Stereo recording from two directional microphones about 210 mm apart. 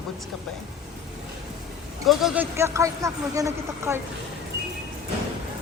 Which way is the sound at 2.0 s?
Centre (ahead or behind).